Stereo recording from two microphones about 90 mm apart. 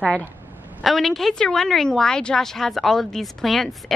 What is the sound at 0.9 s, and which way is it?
A woman's voice, centre (ahead or behind).